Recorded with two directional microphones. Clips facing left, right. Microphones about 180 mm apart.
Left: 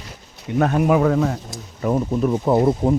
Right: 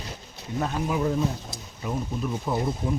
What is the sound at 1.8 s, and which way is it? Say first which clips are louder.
Speech: left 10 dB; 75° left (ahead or behind).